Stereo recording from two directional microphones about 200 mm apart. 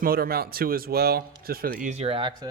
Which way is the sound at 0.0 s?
50° right (ahead or behind).